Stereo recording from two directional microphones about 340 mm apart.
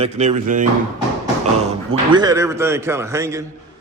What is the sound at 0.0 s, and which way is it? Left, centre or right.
Speech, centre.